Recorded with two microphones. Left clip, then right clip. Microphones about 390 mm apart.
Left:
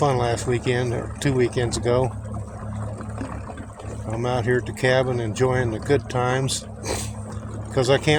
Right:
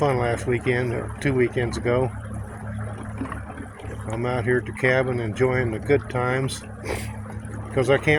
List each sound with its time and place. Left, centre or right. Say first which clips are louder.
0.0 s speech: left 1 dB; right
4.2 s speech: left 1 dB; right
7.8 s speech: even; right